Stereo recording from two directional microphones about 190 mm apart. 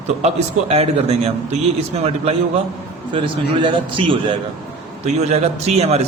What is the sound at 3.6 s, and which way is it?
A man's voice, 25° right (ahead or behind).